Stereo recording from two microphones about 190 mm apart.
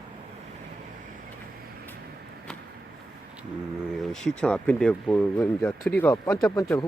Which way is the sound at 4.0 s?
5° left (ahead or behind).